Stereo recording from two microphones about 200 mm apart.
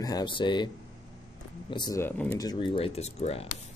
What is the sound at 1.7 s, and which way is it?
Speech, 20° left (ahead or behind).